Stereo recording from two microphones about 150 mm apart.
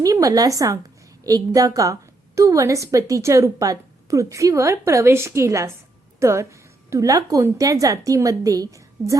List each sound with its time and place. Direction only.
0.0 s a woman's voice: 25° right (ahead or behind)